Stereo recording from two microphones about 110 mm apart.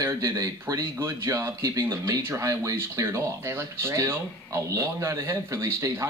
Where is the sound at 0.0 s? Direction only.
30° right (ahead or behind).